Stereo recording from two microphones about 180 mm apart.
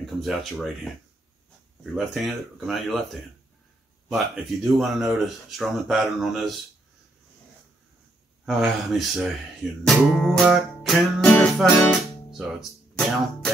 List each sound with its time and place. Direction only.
0.0 s speech: centre (ahead or behind)
1.8 s speech: centre (ahead or behind)
4.7 s speech: centre (ahead or behind)
8.5 s speech: centre (ahead or behind)
9.8 s music: centre (ahead or behind)